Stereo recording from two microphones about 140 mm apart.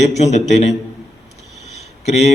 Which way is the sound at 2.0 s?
50° left (ahead or behind).